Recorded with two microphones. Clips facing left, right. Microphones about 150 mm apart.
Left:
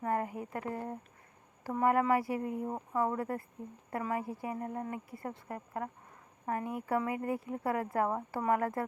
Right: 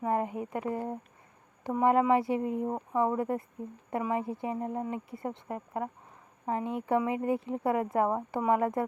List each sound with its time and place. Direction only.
0.0 s speech: 20° right (ahead or behind)